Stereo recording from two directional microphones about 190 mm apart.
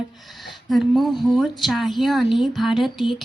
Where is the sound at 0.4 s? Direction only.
Centre (ahead or behind).